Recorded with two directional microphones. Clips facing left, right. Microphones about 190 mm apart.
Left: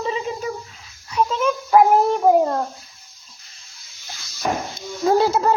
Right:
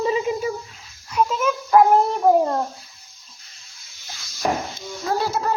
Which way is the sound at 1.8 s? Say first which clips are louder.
Left 1 dB; 10° left (ahead or behind).